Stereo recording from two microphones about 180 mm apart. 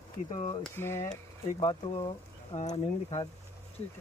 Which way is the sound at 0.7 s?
15° left (ahead or behind).